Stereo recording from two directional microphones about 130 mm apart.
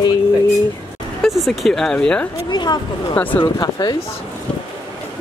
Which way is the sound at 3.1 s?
15° left (ahead or behind).